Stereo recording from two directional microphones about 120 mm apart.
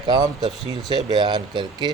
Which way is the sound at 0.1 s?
35° right (ahead or behind).